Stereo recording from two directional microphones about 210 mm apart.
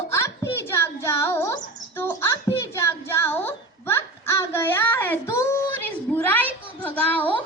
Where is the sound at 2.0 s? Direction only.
10° left (ahead or behind).